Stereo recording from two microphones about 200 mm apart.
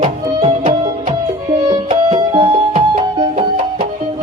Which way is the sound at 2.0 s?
25° right (ahead or behind).